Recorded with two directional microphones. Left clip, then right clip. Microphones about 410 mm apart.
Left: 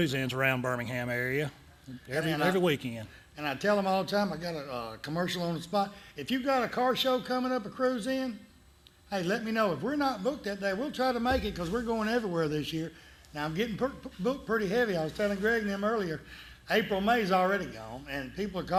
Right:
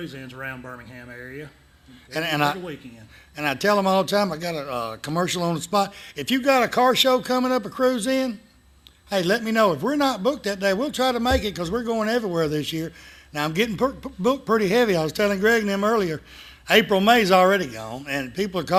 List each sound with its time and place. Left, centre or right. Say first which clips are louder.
0.0 s speech: left 5 dB; left
2.1 s speech: right 5 dB; right